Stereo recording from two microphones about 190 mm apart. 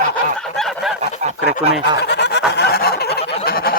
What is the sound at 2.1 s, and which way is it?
Fowl, 65° left (ahead or behind).